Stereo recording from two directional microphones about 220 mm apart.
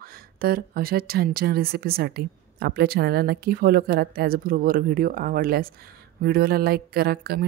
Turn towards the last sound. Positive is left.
turn(degrees=-45)  # may be behind; listen again after turning